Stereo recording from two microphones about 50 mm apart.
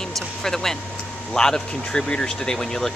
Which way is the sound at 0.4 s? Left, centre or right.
Centre.